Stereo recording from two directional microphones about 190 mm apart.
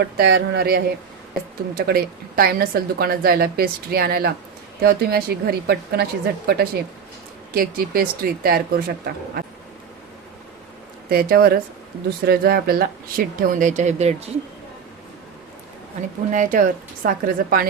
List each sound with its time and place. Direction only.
0.0 s a woman's voice: 55° right (ahead or behind)
11.1 s speech: 55° right (ahead or behind); by 14.3 s 35° right (ahead or behind)
16.3 s speech: 45° right (ahead or behind)